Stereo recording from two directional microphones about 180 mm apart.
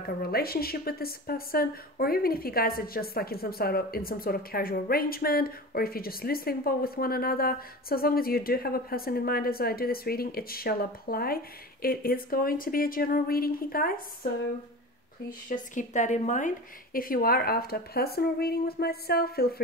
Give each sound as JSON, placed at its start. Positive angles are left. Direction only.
{"t": 0.2, "sound": "a woman's voice", "side_deg": 55}